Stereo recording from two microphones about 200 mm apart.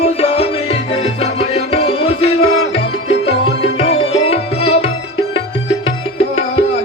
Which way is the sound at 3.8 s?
30° left (ahead or behind).